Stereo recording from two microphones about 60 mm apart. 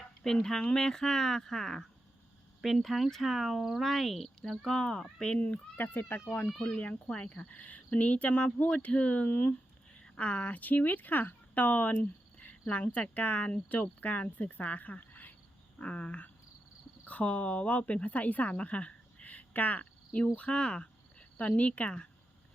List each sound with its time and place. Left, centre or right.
0.2 s speech: centre; by 6.2 s left
6.7 s a woman's voice: centre
20.3 s cricket: centre